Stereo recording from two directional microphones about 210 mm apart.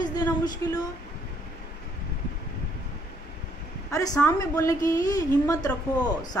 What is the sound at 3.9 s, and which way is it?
A woman's voice, 15° left (ahead or behind).